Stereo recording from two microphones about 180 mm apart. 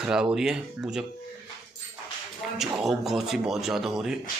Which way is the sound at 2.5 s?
Centre (ahead or behind).